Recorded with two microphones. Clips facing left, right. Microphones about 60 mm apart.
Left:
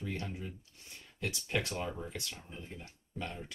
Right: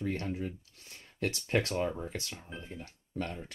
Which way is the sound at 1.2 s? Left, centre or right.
Right.